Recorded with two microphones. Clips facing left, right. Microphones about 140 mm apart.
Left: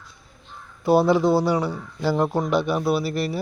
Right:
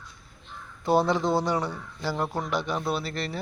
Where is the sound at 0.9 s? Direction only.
5° left (ahead or behind).